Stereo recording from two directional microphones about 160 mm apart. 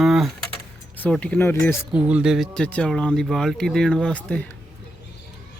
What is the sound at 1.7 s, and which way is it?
Speech, 5° right (ahead or behind).